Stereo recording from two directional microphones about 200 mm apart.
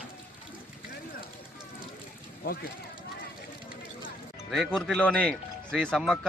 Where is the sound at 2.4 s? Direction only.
50° left (ahead or behind).